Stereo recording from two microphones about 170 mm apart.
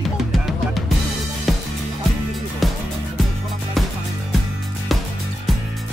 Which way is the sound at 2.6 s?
Centre (ahead or behind).